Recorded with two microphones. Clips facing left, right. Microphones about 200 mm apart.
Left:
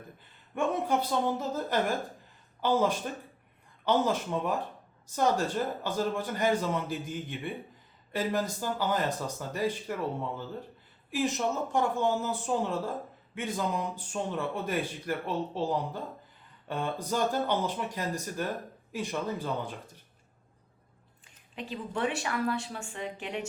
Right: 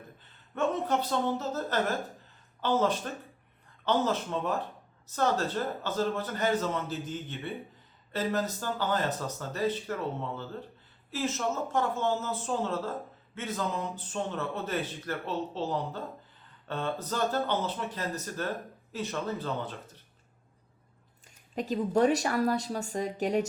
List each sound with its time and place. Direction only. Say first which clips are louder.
0.5 s speech: even; 10° left (ahead or behind)
21.2 s speech: right 7 dB; 40° right (ahead or behind)